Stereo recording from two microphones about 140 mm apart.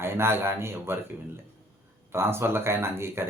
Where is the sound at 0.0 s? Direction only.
15° right (ahead or behind).